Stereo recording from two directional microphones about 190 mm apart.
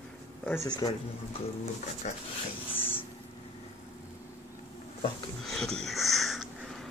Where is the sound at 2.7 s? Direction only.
30° left (ahead or behind).